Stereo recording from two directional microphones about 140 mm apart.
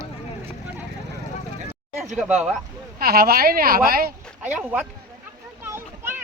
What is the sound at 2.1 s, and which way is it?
Speech, 5° right (ahead or behind).